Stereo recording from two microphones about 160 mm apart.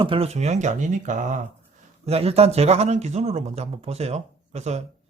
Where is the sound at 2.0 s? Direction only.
40° right (ahead or behind).